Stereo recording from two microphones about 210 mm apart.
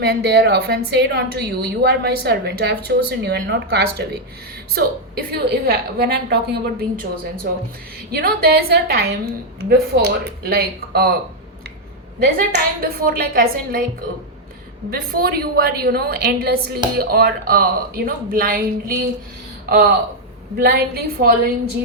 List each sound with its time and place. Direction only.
0.0 s a woman's voice: 50° right (ahead or behind)
12.2 s a woman's voice: 45° right (ahead or behind)
14.8 s a woman's voice: 45° right (ahead or behind)
20.6 s a woman's voice: 50° right (ahead or behind)